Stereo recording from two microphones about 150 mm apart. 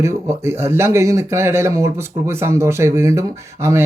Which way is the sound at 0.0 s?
15° right (ahead or behind).